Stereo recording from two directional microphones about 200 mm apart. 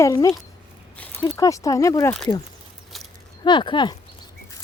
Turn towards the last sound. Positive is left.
turn(degrees=25)  # may be behind; listen again after turning